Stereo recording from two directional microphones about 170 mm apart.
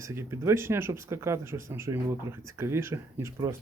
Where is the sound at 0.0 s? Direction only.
15° right (ahead or behind).